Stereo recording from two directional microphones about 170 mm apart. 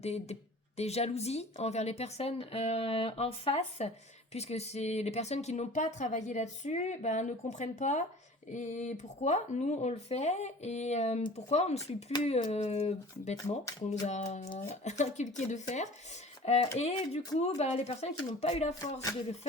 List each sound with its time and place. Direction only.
0.0 s speech: 40° left (ahead or behind)
13.7 s a sound: 20° left (ahead or behind)
14.1 s speech: 45° left (ahead or behind)